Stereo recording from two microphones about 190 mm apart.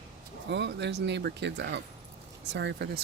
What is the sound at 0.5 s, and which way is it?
Speech, 65° right (ahead or behind).